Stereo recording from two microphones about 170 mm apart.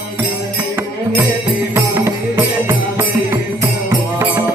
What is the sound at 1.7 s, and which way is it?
Music, 15° right (ahead or behind).